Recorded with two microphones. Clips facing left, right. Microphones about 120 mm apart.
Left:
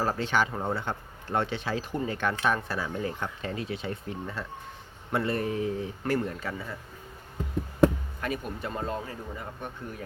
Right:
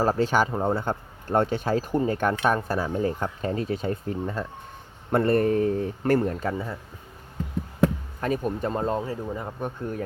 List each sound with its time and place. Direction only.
0.0 s speech: 40° right (ahead or behind)
6.5 s speech: 30° right (ahead or behind)
8.2 s speech: 40° right (ahead or behind)